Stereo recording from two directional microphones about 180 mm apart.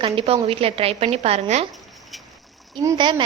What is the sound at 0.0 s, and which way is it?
A woman's voice, 30° right (ahead or behind).